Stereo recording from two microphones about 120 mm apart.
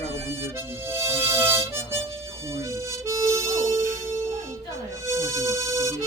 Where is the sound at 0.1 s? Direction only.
20° right (ahead or behind).